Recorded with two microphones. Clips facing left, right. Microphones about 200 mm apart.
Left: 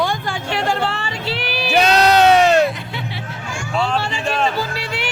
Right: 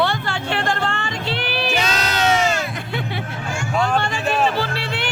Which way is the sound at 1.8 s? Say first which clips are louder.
Left 13 dB; 65° left (ahead or behind).